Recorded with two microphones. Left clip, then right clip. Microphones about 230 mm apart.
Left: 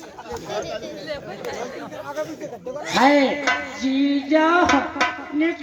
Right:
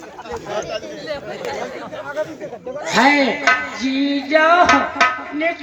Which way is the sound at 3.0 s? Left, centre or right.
Right.